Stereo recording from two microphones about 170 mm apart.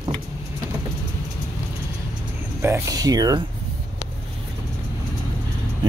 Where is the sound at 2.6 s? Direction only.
15° right (ahead or behind).